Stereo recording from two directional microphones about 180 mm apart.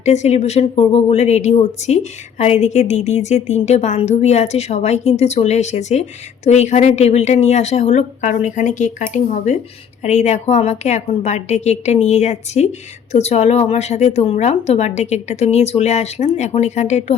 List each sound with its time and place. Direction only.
0.0 s a woman's voice: 40° left (ahead or behind)